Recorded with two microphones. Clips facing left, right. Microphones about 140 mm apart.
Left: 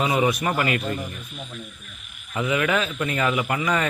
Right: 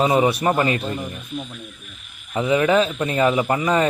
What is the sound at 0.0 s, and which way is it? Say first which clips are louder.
Speech: right 4 dB; 30° right (ahead or behind).